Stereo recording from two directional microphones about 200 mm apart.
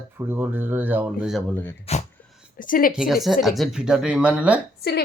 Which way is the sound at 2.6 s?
45° left (ahead or behind).